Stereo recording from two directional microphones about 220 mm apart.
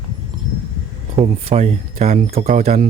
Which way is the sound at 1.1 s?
30° right (ahead or behind).